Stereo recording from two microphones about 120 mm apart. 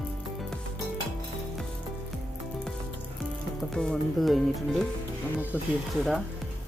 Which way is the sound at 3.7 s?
5° left (ahead or behind).